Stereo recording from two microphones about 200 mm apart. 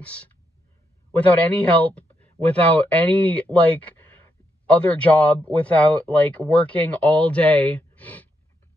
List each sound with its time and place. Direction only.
0.0 s speech: 5° left (ahead or behind)